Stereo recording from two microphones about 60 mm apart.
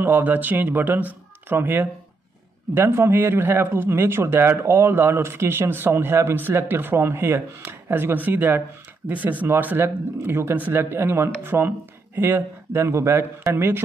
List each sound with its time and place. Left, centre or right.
0.0 s speech: right
12.7 s a man's voice: right
13.5 s speech: right